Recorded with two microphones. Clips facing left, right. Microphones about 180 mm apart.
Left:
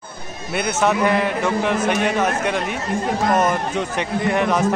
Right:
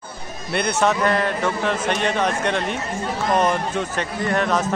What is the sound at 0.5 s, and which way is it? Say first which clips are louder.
A man's voice: even; 5° left (ahead or behind).